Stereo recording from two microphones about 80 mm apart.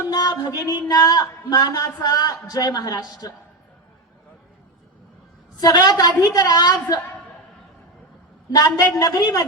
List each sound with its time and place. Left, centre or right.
0.1 s a woman's voice: left
5.5 s speech: left
8.4 s a woman's voice: left